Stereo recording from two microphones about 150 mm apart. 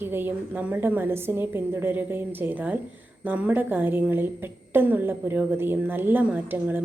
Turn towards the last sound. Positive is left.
turn(degrees=-15)  # may be behind; listen again after turning